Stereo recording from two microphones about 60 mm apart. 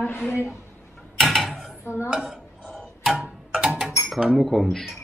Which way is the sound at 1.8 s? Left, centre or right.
Left.